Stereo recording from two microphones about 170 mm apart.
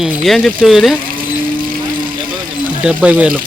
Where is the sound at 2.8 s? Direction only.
10° right (ahead or behind).